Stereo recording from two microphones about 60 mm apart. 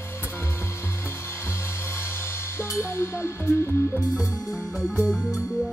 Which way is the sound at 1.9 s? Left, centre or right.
Left.